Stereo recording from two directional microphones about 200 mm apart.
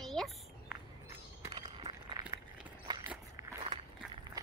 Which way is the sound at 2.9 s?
20° right (ahead or behind).